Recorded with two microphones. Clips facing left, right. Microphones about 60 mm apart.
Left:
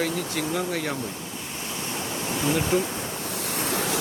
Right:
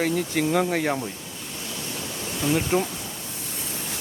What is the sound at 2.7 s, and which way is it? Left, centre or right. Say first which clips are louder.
Speech: even; right.